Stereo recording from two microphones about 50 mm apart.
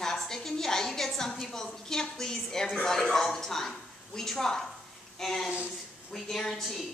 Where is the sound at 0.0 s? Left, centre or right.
Centre.